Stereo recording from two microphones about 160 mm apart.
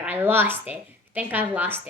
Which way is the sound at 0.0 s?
10° right (ahead or behind).